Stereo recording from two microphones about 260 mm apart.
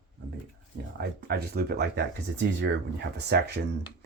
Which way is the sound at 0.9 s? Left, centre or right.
Right.